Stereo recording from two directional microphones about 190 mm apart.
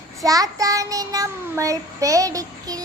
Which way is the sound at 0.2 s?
20° right (ahead or behind).